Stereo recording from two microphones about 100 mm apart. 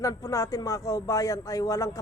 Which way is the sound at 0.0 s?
35° left (ahead or behind).